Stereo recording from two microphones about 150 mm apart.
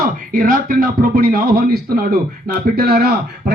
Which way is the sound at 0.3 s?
70° right (ahead or behind).